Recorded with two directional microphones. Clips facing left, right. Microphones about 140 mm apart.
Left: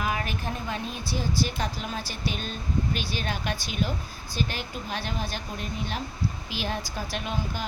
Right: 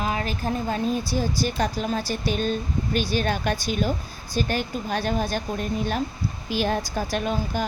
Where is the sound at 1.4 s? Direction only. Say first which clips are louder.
Right 4 dB; 45° right (ahead or behind).